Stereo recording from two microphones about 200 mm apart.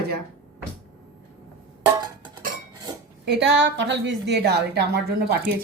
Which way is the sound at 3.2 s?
60° right (ahead or behind).